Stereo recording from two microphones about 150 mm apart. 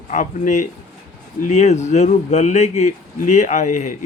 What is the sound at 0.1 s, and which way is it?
Speech, 60° left (ahead or behind).